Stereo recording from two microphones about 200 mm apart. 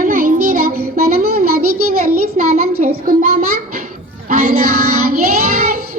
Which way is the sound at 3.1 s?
45° right (ahead or behind).